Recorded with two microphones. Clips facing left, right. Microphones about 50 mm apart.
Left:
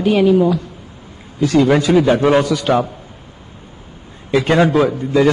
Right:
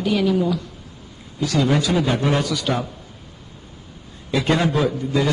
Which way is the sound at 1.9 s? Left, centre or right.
Left.